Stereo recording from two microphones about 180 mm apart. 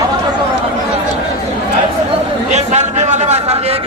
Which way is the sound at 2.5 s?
40° right (ahead or behind).